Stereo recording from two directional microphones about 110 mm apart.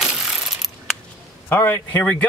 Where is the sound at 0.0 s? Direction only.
5° right (ahead or behind).